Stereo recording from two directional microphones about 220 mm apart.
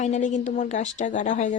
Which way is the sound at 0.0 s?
35° left (ahead or behind).